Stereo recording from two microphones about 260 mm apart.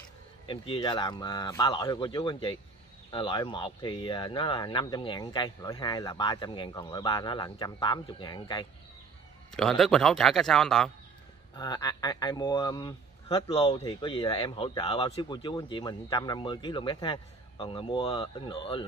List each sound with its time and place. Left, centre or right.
0.5 s a man's voice: centre
9.5 s a man's voice: centre
11.5 s a man's voice: centre